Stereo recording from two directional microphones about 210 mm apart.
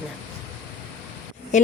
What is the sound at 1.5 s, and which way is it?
Speech, 35° left (ahead or behind).